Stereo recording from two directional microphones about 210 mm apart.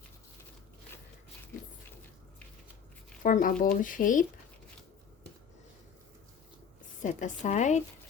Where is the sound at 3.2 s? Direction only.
40° left (ahead or behind).